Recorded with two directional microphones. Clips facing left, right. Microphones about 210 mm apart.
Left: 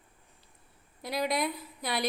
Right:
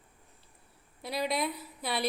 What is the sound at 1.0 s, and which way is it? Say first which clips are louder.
A woman's voice: left 1 dB; centre (ahead or behind).